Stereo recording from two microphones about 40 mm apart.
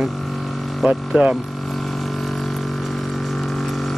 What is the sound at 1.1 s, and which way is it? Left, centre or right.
Speech, right.